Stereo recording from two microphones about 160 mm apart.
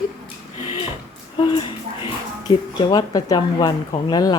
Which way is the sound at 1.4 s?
30° left (ahead or behind).